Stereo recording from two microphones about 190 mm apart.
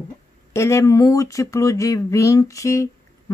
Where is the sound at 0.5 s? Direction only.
15° left (ahead or behind).